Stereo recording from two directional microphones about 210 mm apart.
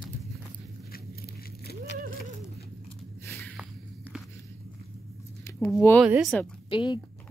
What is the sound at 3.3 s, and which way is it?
Snort, centre (ahead or behind).